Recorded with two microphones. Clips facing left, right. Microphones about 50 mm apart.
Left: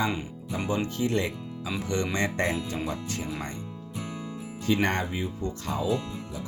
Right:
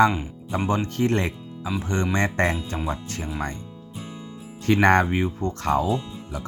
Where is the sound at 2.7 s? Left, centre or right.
Right.